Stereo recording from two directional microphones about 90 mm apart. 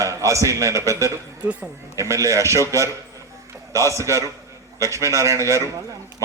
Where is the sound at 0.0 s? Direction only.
35° right (ahead or behind).